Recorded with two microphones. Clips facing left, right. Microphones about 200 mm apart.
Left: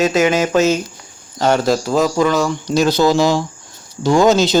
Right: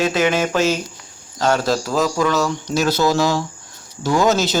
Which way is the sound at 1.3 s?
20° left (ahead or behind).